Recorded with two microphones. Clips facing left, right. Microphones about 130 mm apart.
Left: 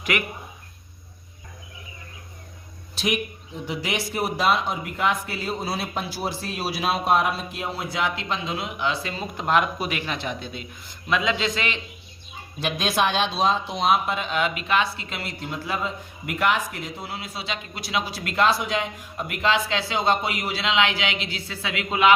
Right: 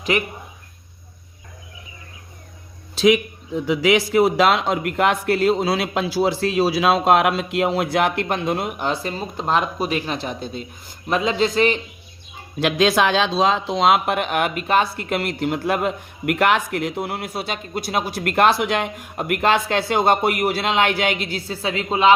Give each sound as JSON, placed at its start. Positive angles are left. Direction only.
{"t": 0.1, "sound": "speech", "side_deg": -30}
{"t": 3.8, "sound": "a man's voice", "side_deg": -90}
{"t": 12.5, "sound": "speech", "side_deg": -90}